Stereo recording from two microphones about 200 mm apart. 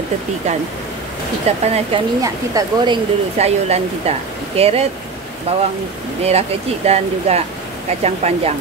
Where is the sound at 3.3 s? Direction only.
30° right (ahead or behind).